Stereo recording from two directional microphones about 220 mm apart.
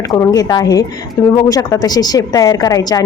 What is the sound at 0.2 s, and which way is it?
Speech, 15° left (ahead or behind).